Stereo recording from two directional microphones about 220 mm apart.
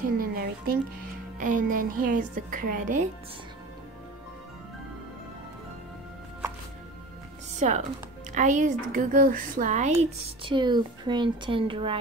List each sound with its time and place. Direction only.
0.2 s music: 40° right (ahead or behind)
1.4 s a woman's voice: 35° right (ahead or behind)
7.5 s a woman's voice: 35° right (ahead or behind)